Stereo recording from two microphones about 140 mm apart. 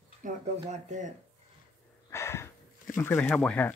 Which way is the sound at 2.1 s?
20° left (ahead or behind).